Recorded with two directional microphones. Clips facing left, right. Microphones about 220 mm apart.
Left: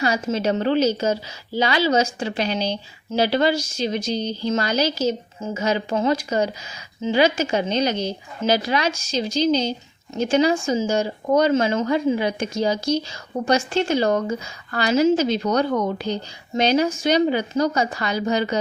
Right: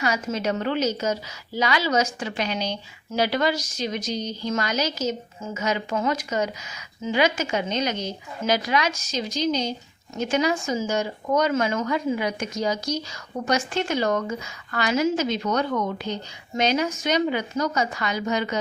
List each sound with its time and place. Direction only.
0.0 s speech: 30° left (ahead or behind)